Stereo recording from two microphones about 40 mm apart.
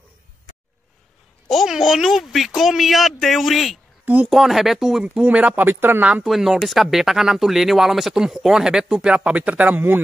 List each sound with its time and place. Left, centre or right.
1.7 s a sound: centre
2.0 s speech: centre
4.0 s a sound: right
4.3 s speech: centre
5.2 s a man's voice: right
5.6 s speech: right
6.2 s speech: centre
9.1 s a man's voice: right